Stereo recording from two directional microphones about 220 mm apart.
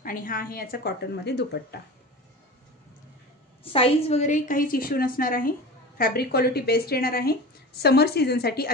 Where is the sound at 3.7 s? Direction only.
25° left (ahead or behind).